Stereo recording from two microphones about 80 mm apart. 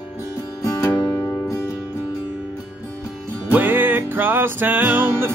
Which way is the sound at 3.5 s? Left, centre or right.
Right.